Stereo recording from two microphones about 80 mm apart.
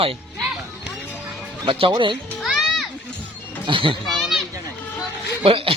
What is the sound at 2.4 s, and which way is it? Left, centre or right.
Music, centre.